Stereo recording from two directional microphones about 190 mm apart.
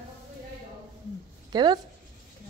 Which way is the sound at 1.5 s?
25° right (ahead or behind).